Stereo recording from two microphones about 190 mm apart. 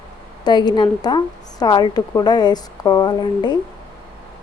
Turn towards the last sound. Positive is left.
turn(degrees=25)  # may be behind; listen again after turning